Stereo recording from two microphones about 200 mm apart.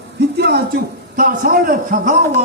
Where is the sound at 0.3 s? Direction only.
50° right (ahead or behind).